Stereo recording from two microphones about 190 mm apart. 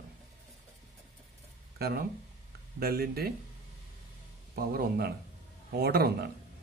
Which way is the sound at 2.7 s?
55° right (ahead or behind).